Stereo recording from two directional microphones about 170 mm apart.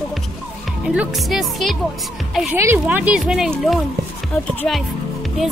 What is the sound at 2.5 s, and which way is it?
Speech, 15° right (ahead or behind).